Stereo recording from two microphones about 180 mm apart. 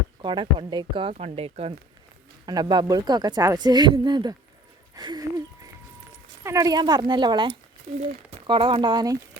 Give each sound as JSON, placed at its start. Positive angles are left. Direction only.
{"t": 0.2, "sound": "speech", "side_deg": -25}
{"t": 2.5, "sound": "speech", "side_deg": -25}
{"t": 6.4, "sound": "speech", "side_deg": -15}